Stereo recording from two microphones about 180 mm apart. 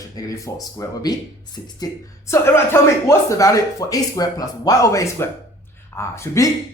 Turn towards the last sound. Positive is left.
turn(degrees=15)  # may be behind; listen again after turning